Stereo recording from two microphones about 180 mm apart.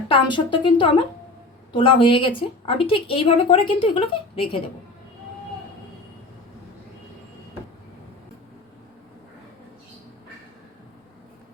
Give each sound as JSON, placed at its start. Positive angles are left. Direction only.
{"t": 0.1, "sound": "a woman's voice", "side_deg": 25}